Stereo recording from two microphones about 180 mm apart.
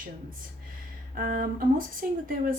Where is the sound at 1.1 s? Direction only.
50° right (ahead or behind).